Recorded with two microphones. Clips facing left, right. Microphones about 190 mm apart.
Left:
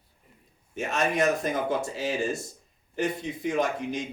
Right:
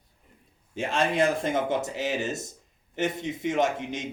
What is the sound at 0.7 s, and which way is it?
Speech, 30° right (ahead or behind).